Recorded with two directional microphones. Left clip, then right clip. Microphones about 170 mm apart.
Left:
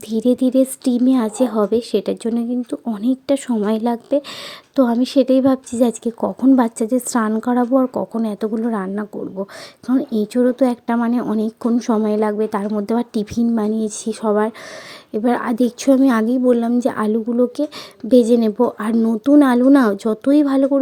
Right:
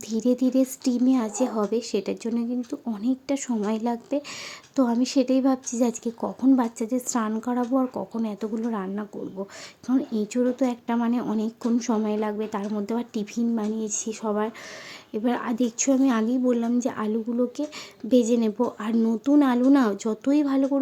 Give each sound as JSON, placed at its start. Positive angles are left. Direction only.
{"t": 0.1, "sound": "speech", "side_deg": 20}